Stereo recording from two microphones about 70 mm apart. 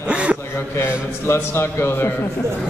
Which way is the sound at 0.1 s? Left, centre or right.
Centre.